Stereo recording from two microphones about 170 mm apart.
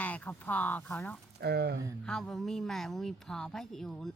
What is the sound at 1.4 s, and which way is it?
Speech, 75° right (ahead or behind).